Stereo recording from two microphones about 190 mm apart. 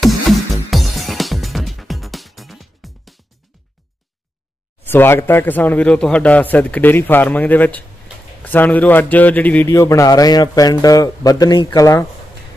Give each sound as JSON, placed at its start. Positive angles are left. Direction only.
{"t": 0.7, "sound": "music", "side_deg": 0}
{"t": 4.8, "sound": "speech", "side_deg": 10}